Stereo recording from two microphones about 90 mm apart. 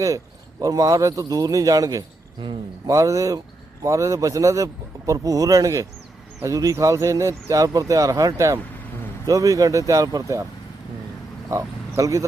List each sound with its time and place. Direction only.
0.6 s speech: 40° right (ahead or behind)
11.5 s speech: 35° right (ahead or behind)